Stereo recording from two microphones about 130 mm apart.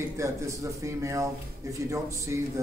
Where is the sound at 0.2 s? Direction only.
25° right (ahead or behind).